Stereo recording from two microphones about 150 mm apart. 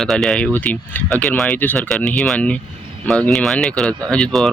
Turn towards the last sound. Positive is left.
turn(degrees=5)  # may be behind; listen again after turning